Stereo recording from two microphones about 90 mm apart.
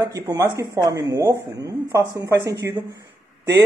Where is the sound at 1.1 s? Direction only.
30° right (ahead or behind).